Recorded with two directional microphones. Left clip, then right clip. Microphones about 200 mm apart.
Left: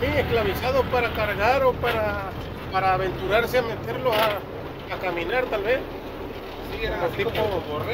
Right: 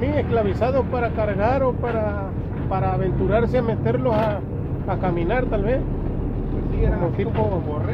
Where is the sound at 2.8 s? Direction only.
15° right (ahead or behind).